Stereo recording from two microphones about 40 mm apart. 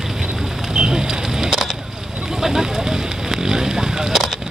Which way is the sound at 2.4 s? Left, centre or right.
Centre.